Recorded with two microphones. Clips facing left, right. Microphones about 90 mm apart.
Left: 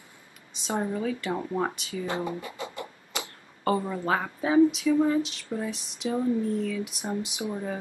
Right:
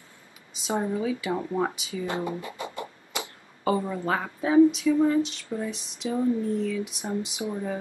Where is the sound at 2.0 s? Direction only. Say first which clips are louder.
Right 1 dB; 20° right (ahead or behind).